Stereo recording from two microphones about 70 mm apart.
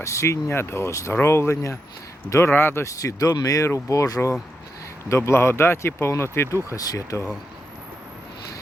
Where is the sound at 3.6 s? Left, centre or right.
Left.